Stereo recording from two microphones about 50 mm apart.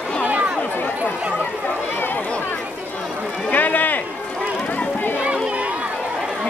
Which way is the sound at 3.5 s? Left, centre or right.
Left.